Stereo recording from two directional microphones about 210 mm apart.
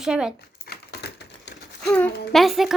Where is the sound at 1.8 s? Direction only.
5° left (ahead or behind).